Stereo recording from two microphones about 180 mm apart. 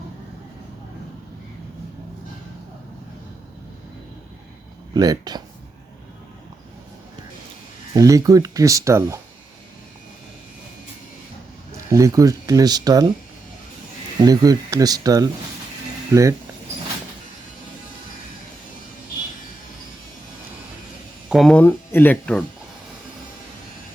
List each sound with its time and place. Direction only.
4.9 s speech: 20° right (ahead or behind)
7.9 s speech: 20° right (ahead or behind)
11.9 s speech: 15° right (ahead or behind)
14.2 s speech: 20° right (ahead or behind)
21.2 s speech: centre (ahead or behind)